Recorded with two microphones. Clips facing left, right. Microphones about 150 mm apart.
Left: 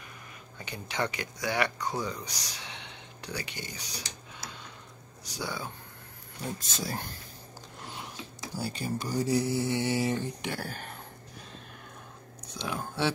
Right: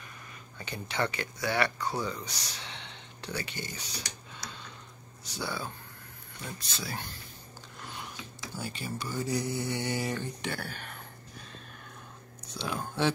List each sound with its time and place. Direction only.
0.6 s speech: 15° left (ahead or behind)
5.3 s speech: 15° left (ahead or behind)
6.4 s speech: 40° left (ahead or behind)
8.2 s speech: 35° left (ahead or behind)
10.6 s speech: 40° left (ahead or behind)
12.7 s speech: 5° left (ahead or behind)